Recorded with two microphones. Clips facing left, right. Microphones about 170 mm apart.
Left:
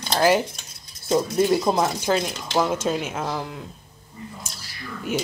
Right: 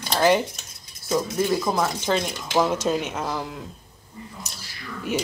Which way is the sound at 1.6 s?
20° left (ahead or behind).